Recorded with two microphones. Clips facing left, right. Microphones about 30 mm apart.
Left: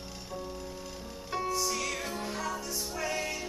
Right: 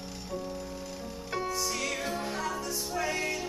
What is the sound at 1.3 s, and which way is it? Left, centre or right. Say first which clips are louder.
Music: left 1 dB; centre.